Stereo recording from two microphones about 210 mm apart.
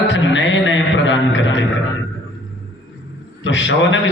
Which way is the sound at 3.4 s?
60° left (ahead or behind).